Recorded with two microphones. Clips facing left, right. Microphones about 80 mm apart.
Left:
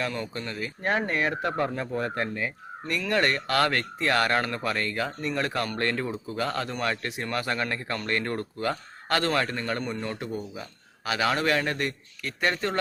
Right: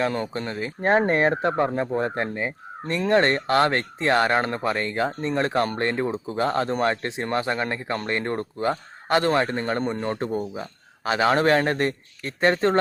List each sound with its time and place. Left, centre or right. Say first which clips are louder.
0.1 s speech: right 5 dB; right